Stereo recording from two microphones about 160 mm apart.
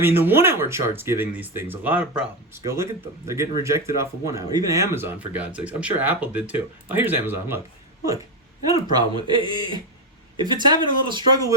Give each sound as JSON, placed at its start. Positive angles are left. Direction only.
{"t": 0.0, "sound": "speech", "side_deg": -15}
{"t": 8.9, "sound": "speech", "side_deg": -30}